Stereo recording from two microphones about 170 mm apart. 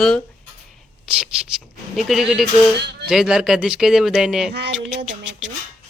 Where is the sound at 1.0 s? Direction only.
5° right (ahead or behind).